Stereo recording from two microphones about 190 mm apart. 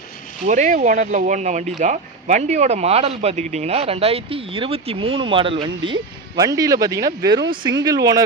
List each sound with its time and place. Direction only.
0.4 s speech: 40° right (ahead or behind); by 8.2 s 20° right (ahead or behind)